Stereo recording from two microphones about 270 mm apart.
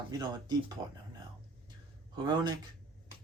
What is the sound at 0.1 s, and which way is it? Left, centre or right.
Speech, centre.